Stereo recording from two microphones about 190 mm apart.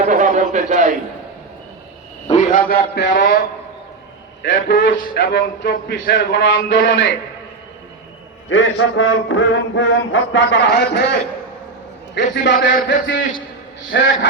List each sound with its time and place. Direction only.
0.0 s a sound: 40° right (ahead or behind)
2.2 s a man's voice: 40° left (ahead or behind); by 3.2 s 65° left (ahead or behind)
4.4 s a man's voice: 75° left (ahead or behind)
4.9 s speech: 45° left (ahead or behind)
5.3 s a man's voice: 60° left (ahead or behind); by 7.2 s 75° left (ahead or behind)
8.4 s mantra: 90° left; by 11.2 s 60° left (ahead or behind)
12.1 s a man's voice: 65° left (ahead or behind)
13.9 s a man's voice: 65° left (ahead or behind)